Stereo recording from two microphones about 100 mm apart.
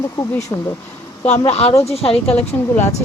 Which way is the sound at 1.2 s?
90° left.